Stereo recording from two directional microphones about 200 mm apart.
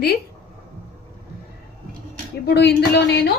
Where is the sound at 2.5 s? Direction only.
55° left (ahead or behind).